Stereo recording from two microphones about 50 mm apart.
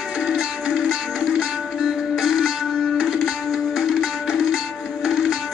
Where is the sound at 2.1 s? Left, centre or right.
Centre.